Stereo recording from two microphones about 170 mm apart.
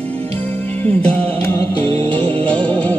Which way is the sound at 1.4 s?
15° left (ahead or behind).